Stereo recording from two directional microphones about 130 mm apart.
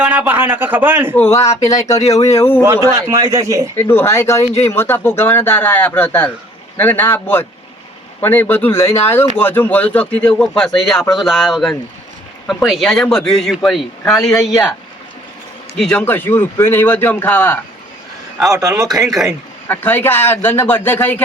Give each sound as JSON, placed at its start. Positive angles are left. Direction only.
{"t": 0.0, "sound": "a man's voice", "side_deg": -15}
{"t": 1.1, "sound": "speech", "side_deg": 15}
{"t": 2.0, "sound": "speech", "side_deg": 60}
{"t": 2.2, "sound": "speech", "side_deg": 20}
{"t": 2.8, "sound": "speech", "side_deg": -25}
{"t": 3.8, "sound": "speech", "side_deg": 15}
{"t": 15.8, "sound": "speech", "side_deg": 10}
{"t": 18.9, "sound": "speech", "side_deg": 0}
{"t": 19.6, "sound": "speech", "side_deg": 15}